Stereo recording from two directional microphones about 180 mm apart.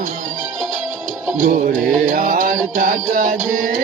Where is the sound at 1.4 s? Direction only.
45° right (ahead or behind).